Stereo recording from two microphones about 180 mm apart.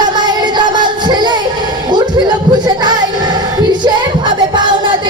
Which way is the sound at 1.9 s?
25° right (ahead or behind).